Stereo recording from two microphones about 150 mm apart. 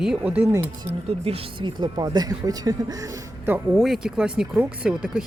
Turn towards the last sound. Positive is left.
turn(degrees=-5)  # may be behind; listen again after turning